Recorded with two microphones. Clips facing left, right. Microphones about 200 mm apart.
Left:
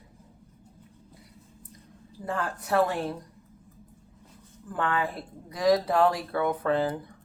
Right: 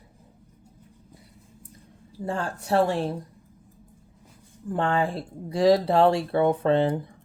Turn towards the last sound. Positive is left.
turn(degrees=-25)  # may be behind; listen again after turning